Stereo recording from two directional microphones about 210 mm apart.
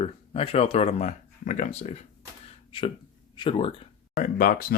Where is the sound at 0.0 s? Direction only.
25° left (ahead or behind).